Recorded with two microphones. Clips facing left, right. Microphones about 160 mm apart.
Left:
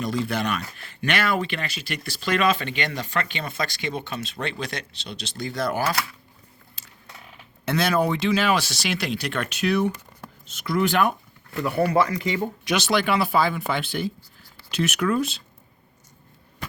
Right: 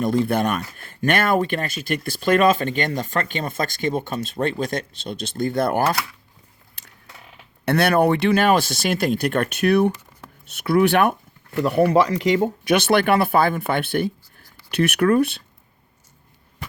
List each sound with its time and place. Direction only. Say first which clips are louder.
0.0 s speech: right 6 dB; 50° right (ahead or behind)
6.8 s a sound: right 5 dB; 60° right (ahead or behind)
7.6 s speech: right 5 dB; 60° right (ahead or behind)
12.4 s speech: right 6 dB; 55° right (ahead or behind)